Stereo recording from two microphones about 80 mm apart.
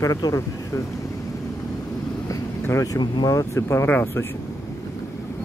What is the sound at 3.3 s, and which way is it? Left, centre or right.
Speech, left.